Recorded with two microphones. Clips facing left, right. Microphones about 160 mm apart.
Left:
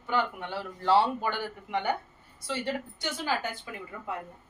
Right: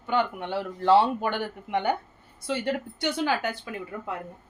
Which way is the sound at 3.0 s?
70° right (ahead or behind).